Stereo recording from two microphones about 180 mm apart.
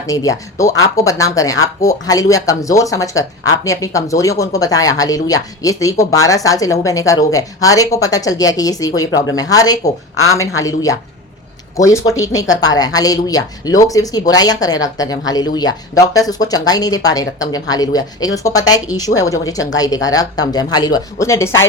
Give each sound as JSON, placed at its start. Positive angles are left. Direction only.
{"t": 0.1, "sound": "a woman's voice", "side_deg": 20}